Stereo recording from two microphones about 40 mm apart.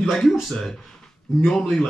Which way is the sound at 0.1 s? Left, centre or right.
Centre.